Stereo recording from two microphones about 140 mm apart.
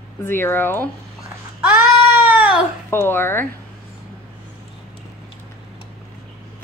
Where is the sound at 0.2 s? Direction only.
15° left (ahead or behind).